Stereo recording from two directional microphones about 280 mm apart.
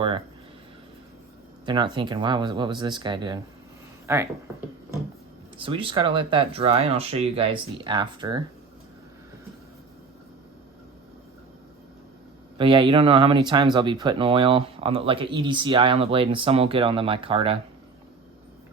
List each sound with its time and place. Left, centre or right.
1.6 s speech: centre
5.5 s speech: centre
12.5 s speech: centre